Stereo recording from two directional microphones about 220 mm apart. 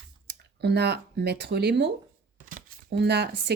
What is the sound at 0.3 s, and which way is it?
Speech, 50° right (ahead or behind).